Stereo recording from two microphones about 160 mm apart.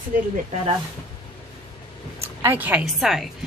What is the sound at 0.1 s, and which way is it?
Speech, 60° right (ahead or behind).